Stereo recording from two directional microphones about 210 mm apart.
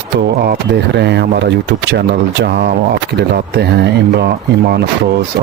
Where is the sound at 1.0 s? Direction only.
55° right (ahead or behind).